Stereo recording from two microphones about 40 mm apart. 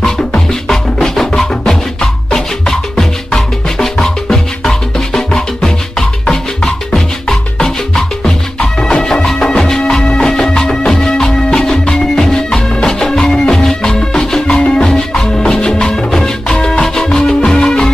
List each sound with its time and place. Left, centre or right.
0.9 s music: centre
12.2 s music: centre